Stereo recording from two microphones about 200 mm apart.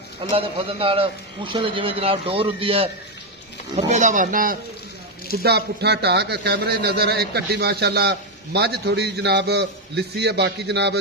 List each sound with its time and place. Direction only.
0.2 s a man's voice: 25° right (ahead or behind)
3.9 s speech: 40° right (ahead or behind)
5.4 s a man's voice: 55° right (ahead or behind)